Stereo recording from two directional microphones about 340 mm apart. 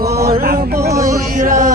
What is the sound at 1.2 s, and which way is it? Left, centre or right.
Chant, right.